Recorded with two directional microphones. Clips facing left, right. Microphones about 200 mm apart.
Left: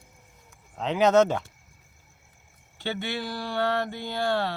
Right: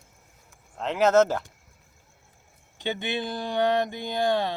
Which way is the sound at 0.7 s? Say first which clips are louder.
Even; centre (ahead or behind).